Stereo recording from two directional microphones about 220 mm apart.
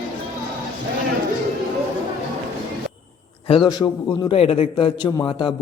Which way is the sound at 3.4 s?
20° left (ahead or behind).